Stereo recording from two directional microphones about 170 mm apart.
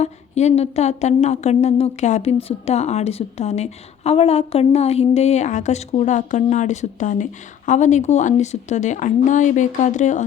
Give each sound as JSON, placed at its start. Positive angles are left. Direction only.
{"t": 0.0, "sound": "speech", "side_deg": 40}